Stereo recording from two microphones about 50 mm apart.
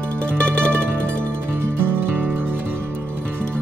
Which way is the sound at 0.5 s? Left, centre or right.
Left.